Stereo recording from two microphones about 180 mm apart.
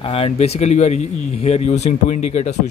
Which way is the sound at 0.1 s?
35° left (ahead or behind).